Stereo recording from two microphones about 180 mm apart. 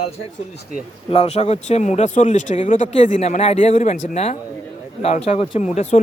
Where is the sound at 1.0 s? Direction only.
35° left (ahead or behind).